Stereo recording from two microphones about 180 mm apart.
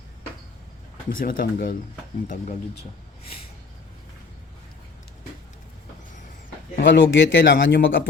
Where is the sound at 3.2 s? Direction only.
30° left (ahead or behind).